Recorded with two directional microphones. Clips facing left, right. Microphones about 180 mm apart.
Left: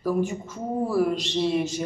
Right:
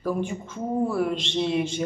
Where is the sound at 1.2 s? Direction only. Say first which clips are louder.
Left 1 dB; 25° right (ahead or behind).